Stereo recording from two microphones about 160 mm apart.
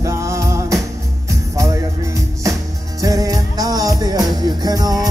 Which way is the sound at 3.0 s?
20° right (ahead or behind).